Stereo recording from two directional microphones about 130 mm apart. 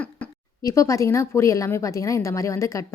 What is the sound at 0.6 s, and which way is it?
A woman's voice, 25° left (ahead or behind).